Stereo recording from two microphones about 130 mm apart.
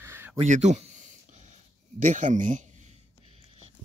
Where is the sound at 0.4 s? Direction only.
60° right (ahead or behind).